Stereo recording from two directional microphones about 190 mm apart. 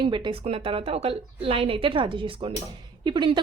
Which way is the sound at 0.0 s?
25° right (ahead or behind).